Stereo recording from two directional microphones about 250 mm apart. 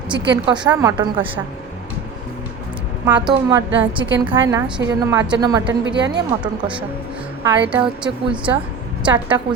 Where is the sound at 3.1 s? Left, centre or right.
Centre.